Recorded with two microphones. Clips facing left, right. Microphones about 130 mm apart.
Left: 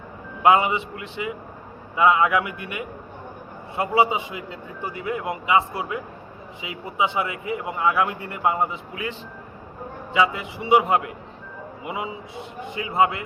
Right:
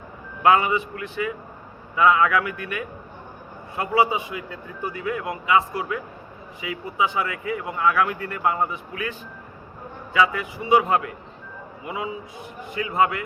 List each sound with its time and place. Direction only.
0.4 s a man's voice: 20° left (ahead or behind)